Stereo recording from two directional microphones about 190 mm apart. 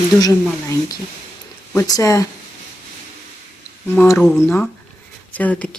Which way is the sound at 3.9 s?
10° left (ahead or behind).